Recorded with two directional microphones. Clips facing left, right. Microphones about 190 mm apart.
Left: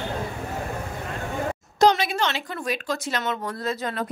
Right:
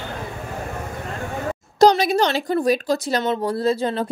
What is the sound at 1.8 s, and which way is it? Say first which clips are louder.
Speech: right 5 dB; 40° right (ahead or behind).